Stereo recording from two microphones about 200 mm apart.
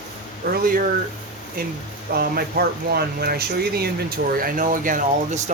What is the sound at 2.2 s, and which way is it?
Speech, 50° right (ahead or behind).